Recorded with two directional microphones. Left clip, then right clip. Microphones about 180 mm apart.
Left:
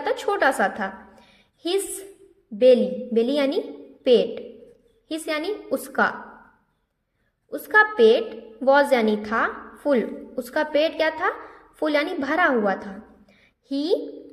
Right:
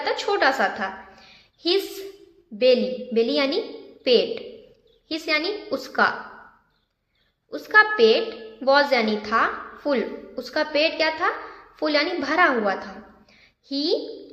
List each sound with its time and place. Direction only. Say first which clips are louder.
0.0 s a woman's voice: even; 30° left (ahead or behind)
7.5 s a woman's voice: right 1 dB; 30° left (ahead or behind)